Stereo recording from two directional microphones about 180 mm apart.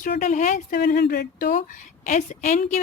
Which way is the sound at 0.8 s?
60° left (ahead or behind).